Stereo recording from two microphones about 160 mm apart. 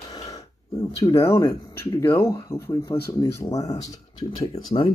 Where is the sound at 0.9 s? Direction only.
20° left (ahead or behind).